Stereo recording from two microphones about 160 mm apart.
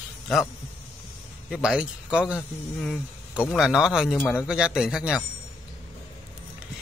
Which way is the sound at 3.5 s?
Centre (ahead or behind).